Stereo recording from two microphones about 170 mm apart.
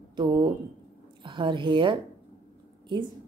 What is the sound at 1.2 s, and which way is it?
A woman's voice, 30° right (ahead or behind).